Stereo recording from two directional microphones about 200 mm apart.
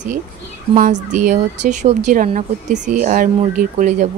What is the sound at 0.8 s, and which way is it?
Speech, 40° right (ahead or behind).